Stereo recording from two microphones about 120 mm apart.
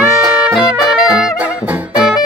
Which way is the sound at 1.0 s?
5° right (ahead or behind).